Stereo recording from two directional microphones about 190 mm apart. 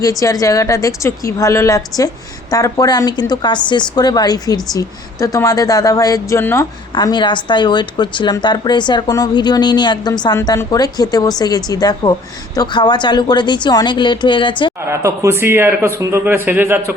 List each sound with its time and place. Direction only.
0.0 s a woman's voice: 20° left (ahead or behind)
14.8 s a man's voice: 15° right (ahead or behind)